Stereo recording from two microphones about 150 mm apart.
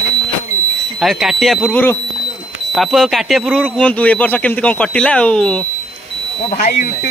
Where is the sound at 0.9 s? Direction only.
Centre (ahead or behind).